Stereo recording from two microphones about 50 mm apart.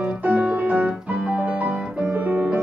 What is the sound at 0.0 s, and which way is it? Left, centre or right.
Music, right.